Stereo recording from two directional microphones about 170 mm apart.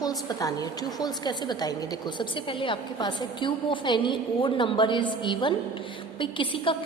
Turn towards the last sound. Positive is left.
turn(degrees=30)  # may be behind; listen again after turning